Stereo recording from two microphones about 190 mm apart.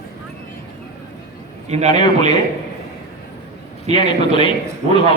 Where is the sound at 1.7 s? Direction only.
35° right (ahead or behind).